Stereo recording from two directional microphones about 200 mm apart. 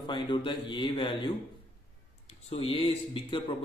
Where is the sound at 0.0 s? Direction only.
25° left (ahead or behind).